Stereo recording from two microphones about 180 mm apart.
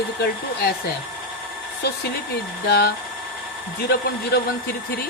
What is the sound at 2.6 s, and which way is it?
Speech, 65° left (ahead or behind).